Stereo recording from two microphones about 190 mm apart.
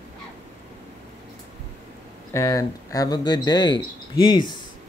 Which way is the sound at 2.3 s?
15° left (ahead or behind).